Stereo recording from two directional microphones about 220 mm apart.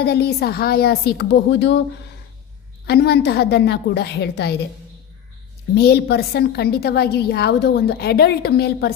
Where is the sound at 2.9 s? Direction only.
45° left (ahead or behind).